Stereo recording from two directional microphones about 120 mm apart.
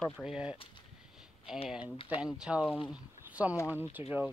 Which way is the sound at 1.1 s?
5° right (ahead or behind).